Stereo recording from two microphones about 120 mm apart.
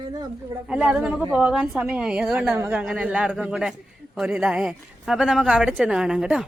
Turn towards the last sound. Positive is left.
turn(degrees=-5)  # may be behind; listen again after turning